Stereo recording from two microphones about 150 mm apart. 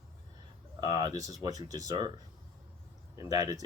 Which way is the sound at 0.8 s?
30° right (ahead or behind).